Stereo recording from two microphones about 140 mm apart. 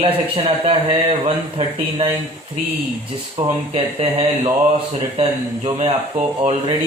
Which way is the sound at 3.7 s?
45° right (ahead or behind).